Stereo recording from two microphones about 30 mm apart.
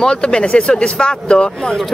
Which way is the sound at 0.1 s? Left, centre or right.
Left.